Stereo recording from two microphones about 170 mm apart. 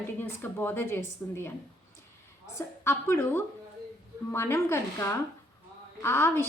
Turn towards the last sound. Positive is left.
turn(degrees=15)  # may be behind; listen again after turning